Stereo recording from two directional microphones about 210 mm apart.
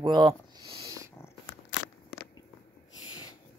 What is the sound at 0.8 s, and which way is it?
Purr, 15° right (ahead or behind).